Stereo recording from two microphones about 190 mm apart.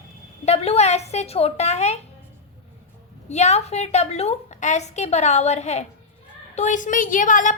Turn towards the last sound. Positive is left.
turn(degrees=40)  # may be behind; listen again after turning